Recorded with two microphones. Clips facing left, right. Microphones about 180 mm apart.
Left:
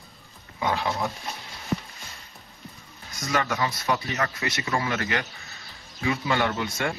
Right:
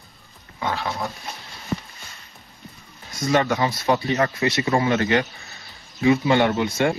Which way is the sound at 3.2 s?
30° right (ahead or behind).